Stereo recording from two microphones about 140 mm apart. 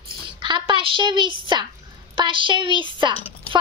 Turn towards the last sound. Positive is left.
turn(degrees=-35)  # may be behind; listen again after turning